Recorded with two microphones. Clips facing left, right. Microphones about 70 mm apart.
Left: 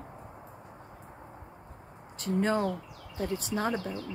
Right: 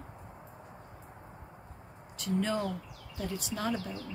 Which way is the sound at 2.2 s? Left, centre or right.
Left.